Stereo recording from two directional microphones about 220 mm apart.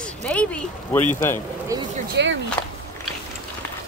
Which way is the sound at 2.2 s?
50° right (ahead or behind).